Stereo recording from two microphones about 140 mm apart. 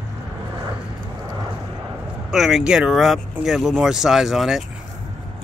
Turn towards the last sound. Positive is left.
turn(degrees=-5)  # may be behind; listen again after turning